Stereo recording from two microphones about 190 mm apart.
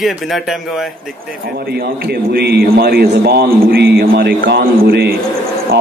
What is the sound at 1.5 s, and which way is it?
A man's voice, 55° right (ahead or behind).